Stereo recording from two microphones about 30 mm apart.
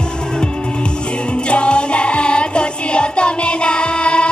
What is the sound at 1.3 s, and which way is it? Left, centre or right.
Music, left.